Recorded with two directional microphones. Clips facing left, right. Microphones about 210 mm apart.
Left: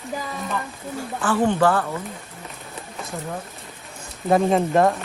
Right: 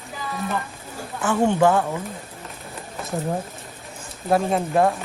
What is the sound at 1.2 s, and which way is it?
Speech, 10° right (ahead or behind).